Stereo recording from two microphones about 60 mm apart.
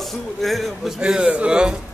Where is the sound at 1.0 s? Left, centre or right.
Centre.